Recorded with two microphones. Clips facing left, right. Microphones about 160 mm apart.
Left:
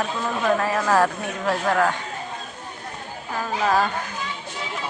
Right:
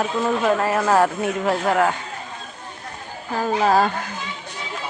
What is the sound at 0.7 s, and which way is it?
Speech, 20° right (ahead or behind).